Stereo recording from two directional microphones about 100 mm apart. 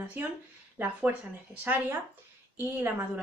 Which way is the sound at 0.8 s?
20° right (ahead or behind).